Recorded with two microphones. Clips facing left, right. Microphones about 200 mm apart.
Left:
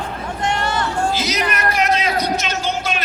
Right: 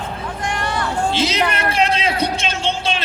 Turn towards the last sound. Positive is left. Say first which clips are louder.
# even
turn(degrees=-30)  # may be behind; listen again after turning